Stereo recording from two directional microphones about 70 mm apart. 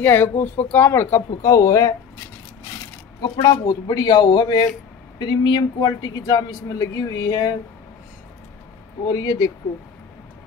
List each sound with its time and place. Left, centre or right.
0.0 s speech: left
1.4 s speech: left
3.2 s a man's voice: left
5.2 s speech: left
6.8 s speech: left
9.0 s speech: left